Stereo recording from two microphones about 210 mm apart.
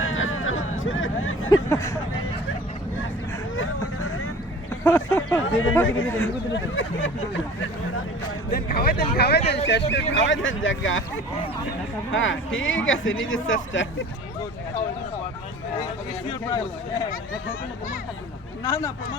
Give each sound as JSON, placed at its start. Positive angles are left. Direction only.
{"t": 0.0, "sound": "a sound", "side_deg": 70}
{"t": 0.9, "sound": "vehicle", "side_deg": 70}
{"t": 3.5, "sound": "vehicle", "side_deg": 70}
{"t": 4.8, "sound": "a sound", "side_deg": 10}
{"t": 5.4, "sound": "a sound", "side_deg": 75}
{"t": 5.8, "sound": "speech", "side_deg": 70}
{"t": 6.1, "sound": "a man's voice", "side_deg": 10}
{"t": 6.5, "sound": "speech", "side_deg": 65}
{"t": 8.4, "sound": "speech", "side_deg": 45}
{"t": 12.1, "sound": "speech", "side_deg": 65}
{"t": 18.6, "sound": "a man's voice", "side_deg": 15}